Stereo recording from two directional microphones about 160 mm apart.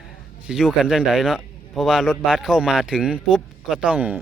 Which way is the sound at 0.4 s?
5° right (ahead or behind).